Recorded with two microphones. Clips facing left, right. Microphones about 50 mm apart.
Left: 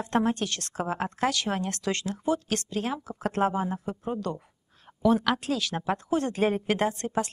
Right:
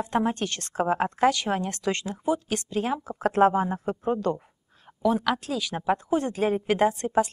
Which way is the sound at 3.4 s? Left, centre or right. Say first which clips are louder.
Right 6 dB; right.